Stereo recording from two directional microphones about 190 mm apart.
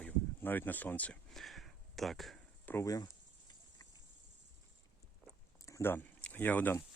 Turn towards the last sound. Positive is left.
turn(degrees=10)  # may be behind; listen again after turning